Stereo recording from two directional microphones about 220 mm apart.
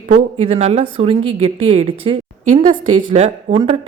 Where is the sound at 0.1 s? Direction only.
30° right (ahead or behind).